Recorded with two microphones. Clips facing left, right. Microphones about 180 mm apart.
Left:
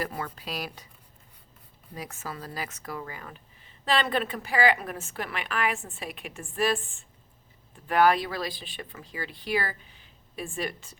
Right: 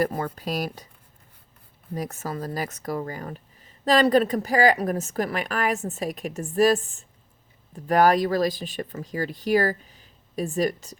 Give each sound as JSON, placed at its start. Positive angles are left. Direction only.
{"t": 0.0, "sound": "speech", "side_deg": -45}
{"t": 2.0, "sound": "speech", "side_deg": -40}